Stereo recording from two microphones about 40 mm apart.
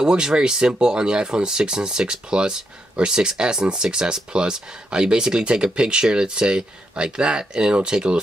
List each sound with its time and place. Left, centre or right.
0.0 s speech: centre